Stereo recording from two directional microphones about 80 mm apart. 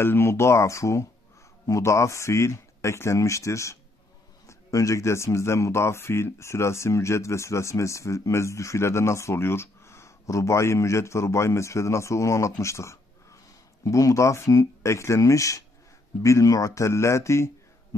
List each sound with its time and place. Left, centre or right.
0.0 s speech: left